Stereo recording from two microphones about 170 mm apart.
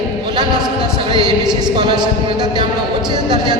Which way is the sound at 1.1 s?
25° right (ahead or behind).